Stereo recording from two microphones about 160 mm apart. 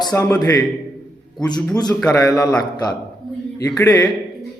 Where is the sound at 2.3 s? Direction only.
20° left (ahead or behind).